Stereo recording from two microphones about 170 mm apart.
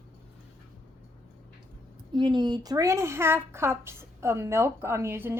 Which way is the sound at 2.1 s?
25° right (ahead or behind).